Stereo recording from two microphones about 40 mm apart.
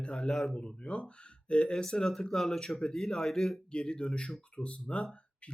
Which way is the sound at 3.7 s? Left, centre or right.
Left.